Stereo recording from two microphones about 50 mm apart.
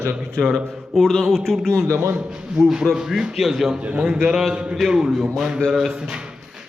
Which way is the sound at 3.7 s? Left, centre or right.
Right.